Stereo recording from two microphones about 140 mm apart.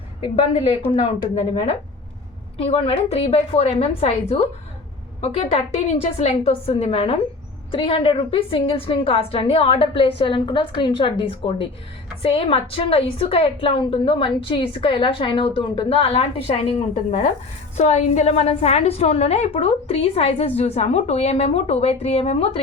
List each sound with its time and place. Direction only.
0.2 s a woman's voice: 40° left (ahead or behind)